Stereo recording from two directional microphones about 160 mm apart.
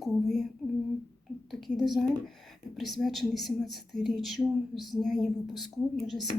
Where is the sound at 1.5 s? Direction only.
Centre (ahead or behind).